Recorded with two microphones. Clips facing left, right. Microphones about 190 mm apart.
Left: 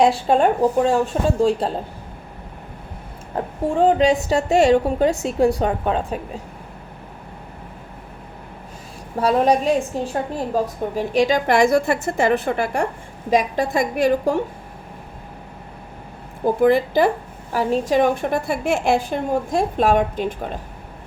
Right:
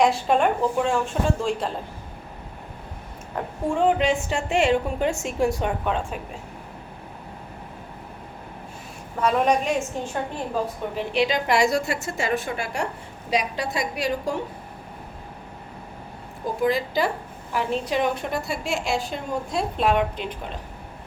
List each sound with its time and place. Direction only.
0.0 s a woman's voice: 35° left (ahead or behind)
3.3 s a woman's voice: 35° left (ahead or behind)
9.2 s a woman's voice: 35° left (ahead or behind); by 14.3 s 50° left (ahead or behind)
16.6 s speech: 55° left (ahead or behind)
17.5 s a woman's voice: 40° left (ahead or behind)